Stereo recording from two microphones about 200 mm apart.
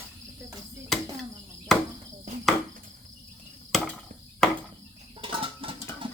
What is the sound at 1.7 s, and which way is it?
Cricket, centre (ahead or behind).